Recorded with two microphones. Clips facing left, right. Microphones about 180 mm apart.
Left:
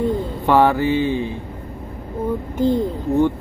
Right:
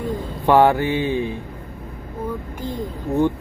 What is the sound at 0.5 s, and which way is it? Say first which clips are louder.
Speech: even; 20° right (ahead or behind).